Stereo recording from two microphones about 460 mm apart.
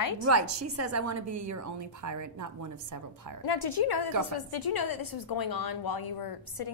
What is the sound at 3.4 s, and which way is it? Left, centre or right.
A woman's voice, left.